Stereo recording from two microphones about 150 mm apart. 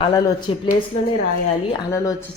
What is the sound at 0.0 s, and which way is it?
Speech, 30° left (ahead or behind).